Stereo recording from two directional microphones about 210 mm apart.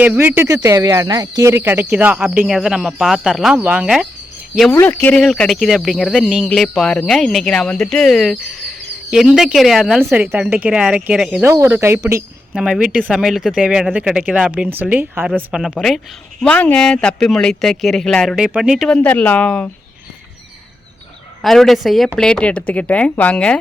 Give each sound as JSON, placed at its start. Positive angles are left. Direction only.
{"t": 0.0, "sound": "speech", "side_deg": -5}
{"t": 21.4, "sound": "speech", "side_deg": 0}